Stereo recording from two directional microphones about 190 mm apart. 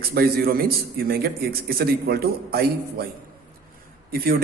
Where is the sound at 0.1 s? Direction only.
55° right (ahead or behind).